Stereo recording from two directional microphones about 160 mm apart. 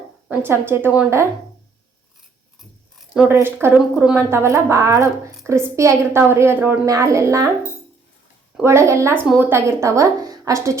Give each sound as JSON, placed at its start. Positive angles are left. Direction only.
{"t": 0.3, "sound": "a woman's voice", "side_deg": -15}
{"t": 3.3, "sound": "a woman's voice", "side_deg": -15}
{"t": 8.6, "sound": "a woman's voice", "side_deg": -15}